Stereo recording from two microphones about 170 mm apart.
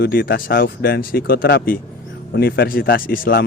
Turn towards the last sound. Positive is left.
turn(degrees=60)  # may be behind; listen again after turning